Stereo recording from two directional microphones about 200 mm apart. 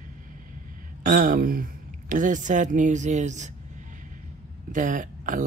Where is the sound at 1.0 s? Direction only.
45° right (ahead or behind).